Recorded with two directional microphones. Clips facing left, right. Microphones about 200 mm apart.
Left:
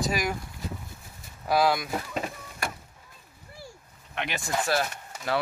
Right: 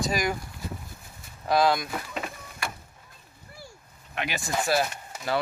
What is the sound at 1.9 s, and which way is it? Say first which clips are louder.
Vehicle: left 2 dB; 35° left (ahead or behind).